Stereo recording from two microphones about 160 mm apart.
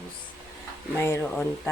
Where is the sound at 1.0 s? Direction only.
15° left (ahead or behind).